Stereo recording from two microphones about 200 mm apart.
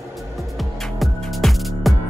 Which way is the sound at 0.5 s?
Centre (ahead or behind).